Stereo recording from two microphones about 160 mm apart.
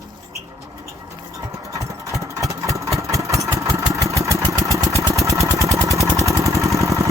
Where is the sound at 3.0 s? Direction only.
20° right (ahead or behind).